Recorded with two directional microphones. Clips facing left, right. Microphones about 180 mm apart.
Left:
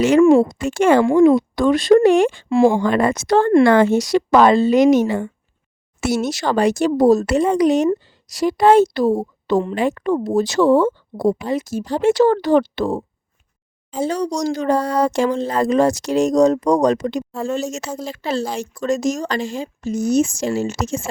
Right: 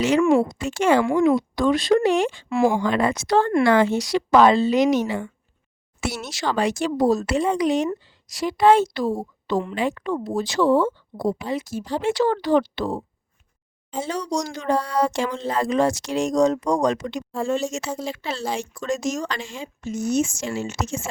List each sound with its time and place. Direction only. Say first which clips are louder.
0.2 s speech: left 8 dB; 30° left (ahead or behind)
0.4 s speech: left 5 dB; 50° left (ahead or behind)
2.5 s speech: left 5 dB; 30° left (ahead or behind)
2.8 s a woman's voice: left 4 dB; 50° left (ahead or behind)
14.0 s speech: left 6 dB; 40° left (ahead or behind)
17.3 s speech: right 4 dB; centre (ahead or behind)
17.6 s speech: left 2 dB; 40° left (ahead or behind)